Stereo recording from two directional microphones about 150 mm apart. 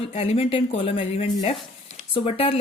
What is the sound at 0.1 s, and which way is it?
A woman's voice, 40° left (ahead or behind).